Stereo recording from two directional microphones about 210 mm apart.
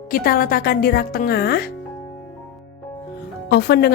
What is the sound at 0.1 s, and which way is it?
Speech, 45° left (ahead or behind).